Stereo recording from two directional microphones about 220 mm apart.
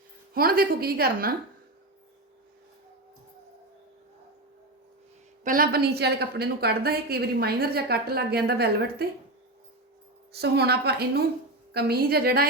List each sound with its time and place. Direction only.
0.3 s a woman's voice: 45° right (ahead or behind)
5.4 s a woman's voice: 40° right (ahead or behind)
10.3 s a woman's voice: 45° right (ahead or behind)